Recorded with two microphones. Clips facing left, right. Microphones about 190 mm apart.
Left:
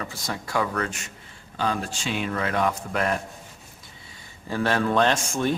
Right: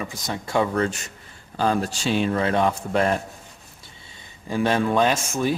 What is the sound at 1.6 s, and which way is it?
Speech, 40° right (ahead or behind).